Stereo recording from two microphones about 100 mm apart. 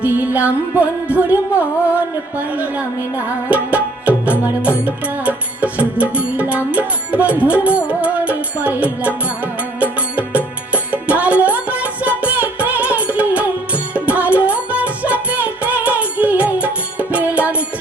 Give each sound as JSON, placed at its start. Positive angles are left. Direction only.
{"t": 0.0, "sound": "music", "side_deg": -15}
{"t": 3.5, "sound": "music", "side_deg": -15}